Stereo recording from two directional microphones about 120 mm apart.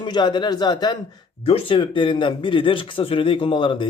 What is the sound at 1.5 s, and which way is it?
Speech, 50° left (ahead or behind).